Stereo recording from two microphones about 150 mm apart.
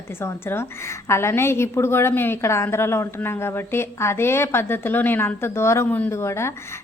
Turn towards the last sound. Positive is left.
turn(degrees=20)  # may be behind; listen again after turning